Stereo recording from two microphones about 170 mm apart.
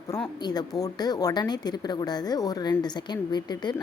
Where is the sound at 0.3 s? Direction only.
25° left (ahead or behind).